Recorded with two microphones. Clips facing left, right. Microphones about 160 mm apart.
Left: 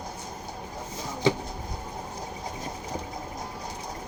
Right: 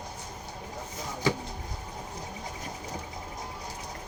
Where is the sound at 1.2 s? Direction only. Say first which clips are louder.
Left 4 dB; 25° left (ahead or behind).